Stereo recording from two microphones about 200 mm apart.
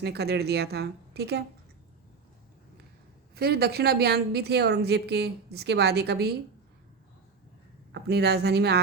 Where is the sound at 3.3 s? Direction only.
50° right (ahead or behind).